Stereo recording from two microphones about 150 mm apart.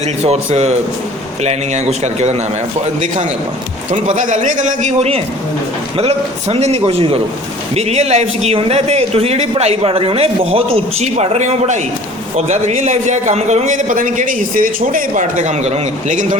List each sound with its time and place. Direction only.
0.2 s a man's voice: 45° right (ahead or behind)
3.9 s a man's voice: 55° right (ahead or behind)